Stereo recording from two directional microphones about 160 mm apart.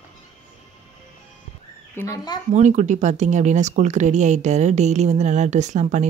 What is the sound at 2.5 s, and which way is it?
Speech, 45° right (ahead or behind).